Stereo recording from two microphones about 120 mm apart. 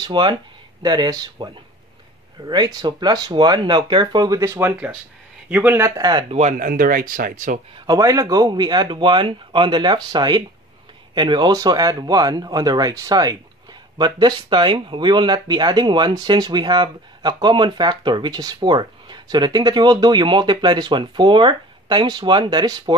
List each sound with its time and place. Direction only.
0.0 s speech: 40° right (ahead or behind)
6.3 s speech: 75° right (ahead or behind)
7.3 s speech: 90° right
7.8 s speech: 30° right (ahead or behind)